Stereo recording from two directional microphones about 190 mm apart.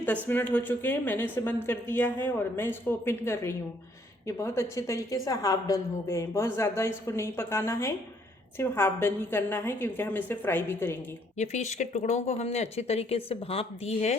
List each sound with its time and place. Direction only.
0.3 s a woman's voice: 10° left (ahead or behind)
11.3 s speech: 35° left (ahead or behind)